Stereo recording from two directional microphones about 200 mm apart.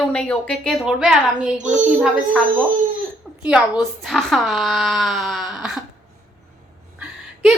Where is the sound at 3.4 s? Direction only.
5° right (ahead or behind).